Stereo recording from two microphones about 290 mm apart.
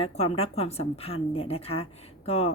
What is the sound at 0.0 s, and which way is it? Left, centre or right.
Speech, left.